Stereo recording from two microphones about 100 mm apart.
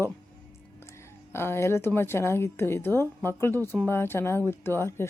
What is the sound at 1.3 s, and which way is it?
Speech, 25° left (ahead or behind).